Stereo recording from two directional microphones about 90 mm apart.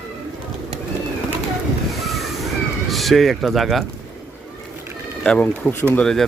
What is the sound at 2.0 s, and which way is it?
Waves, centre (ahead or behind).